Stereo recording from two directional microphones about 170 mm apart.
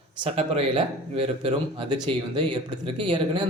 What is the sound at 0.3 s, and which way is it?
Speech, 35° right (ahead or behind).